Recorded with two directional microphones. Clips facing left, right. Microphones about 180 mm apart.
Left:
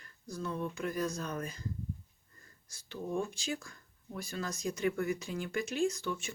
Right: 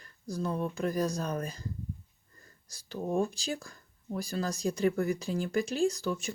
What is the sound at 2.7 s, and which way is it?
Speech, 35° right (ahead or behind).